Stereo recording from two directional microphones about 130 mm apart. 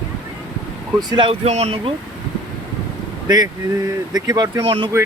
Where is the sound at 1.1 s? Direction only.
35° right (ahead or behind).